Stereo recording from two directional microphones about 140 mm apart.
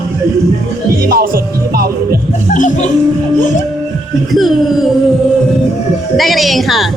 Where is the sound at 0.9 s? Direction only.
90° right.